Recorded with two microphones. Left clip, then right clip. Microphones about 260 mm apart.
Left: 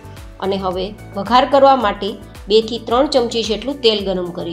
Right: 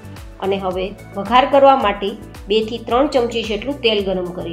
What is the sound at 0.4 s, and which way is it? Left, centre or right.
A woman's voice, left.